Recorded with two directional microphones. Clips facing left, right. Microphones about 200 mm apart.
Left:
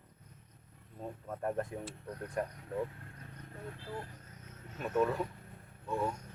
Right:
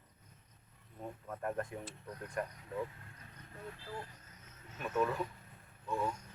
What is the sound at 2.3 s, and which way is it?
Speech, 35° left (ahead or behind).